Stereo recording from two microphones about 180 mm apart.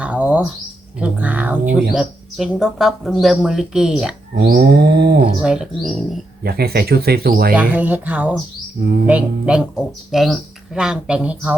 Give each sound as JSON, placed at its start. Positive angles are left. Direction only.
{"t": 0.0, "sound": "bird", "side_deg": -10}
{"t": 0.9, "sound": "speech", "side_deg": -5}
{"t": 4.4, "sound": "speech", "side_deg": -60}
{"t": 5.4, "sound": "speech", "side_deg": -5}
{"t": 6.4, "sound": "speech", "side_deg": -60}
{"t": 7.5, "sound": "speech", "side_deg": -10}